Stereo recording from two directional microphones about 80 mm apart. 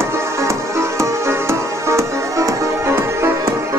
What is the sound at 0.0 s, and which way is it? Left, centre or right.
Music, right.